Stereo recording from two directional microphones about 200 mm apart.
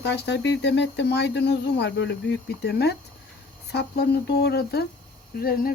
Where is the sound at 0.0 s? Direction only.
60° left (ahead or behind).